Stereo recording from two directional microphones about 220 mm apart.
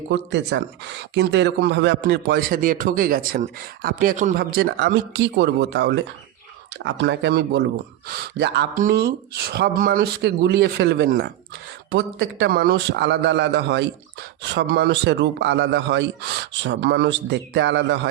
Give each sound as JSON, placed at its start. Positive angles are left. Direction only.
{"t": 0.1, "sound": "a man's voice", "side_deg": -55}